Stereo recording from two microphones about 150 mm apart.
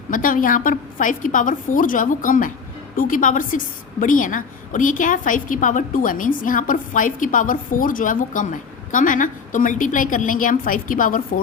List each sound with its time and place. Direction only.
0.1 s a woman's voice: 65° left (ahead or behind)